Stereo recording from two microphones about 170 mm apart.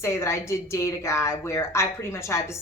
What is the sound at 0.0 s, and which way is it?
A woman's voice, 15° left (ahead or behind).